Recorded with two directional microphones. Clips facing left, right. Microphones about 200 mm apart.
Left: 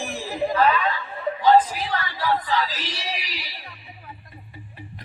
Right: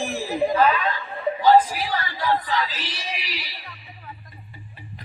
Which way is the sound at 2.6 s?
40° left (ahead or behind).